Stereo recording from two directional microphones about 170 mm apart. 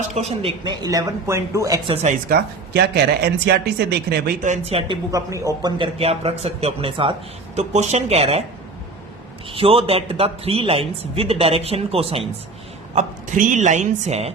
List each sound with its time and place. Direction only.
0.1 s speech: 40° right (ahead or behind)
0.6 s speech: 25° right (ahead or behind)
1.9 s speech: 40° right (ahead or behind)
2.3 s speech: 75° right (ahead or behind)
4.4 s speech: 40° right (ahead or behind)
7.7 s speech: 40° right (ahead or behind)
9.5 s speech: 35° right (ahead or behind)
12.9 s speech: 45° right (ahead or behind)